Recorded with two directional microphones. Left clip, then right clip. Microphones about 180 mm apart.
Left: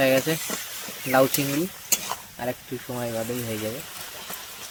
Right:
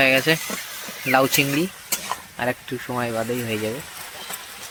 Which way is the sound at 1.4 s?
5° left (ahead or behind).